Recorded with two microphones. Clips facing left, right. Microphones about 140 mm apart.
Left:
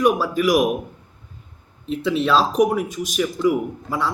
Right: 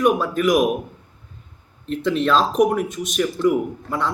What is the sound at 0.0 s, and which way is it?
Speech, 5° left (ahead or behind).